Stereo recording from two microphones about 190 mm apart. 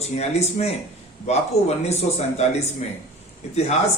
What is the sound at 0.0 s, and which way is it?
A man's voice, 35° left (ahead or behind).